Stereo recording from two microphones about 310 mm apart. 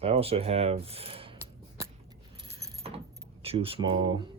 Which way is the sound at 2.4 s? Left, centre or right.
Centre.